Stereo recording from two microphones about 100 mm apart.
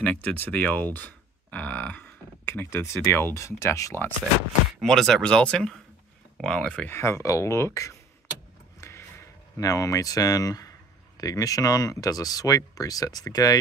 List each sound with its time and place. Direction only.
0.0 s speech: 15° left (ahead or behind)
4.7 s speech: 5° left (ahead or behind)
6.9 s speech: 25° left (ahead or behind)
8.8 s a sound: 30° left (ahead or behind)
9.6 s speech: 35° left (ahead or behind)